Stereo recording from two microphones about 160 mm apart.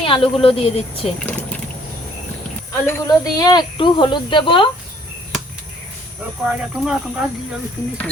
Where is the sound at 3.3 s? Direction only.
25° left (ahead or behind).